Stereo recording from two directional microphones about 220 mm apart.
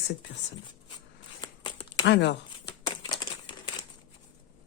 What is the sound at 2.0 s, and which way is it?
Speech, 50° left (ahead or behind).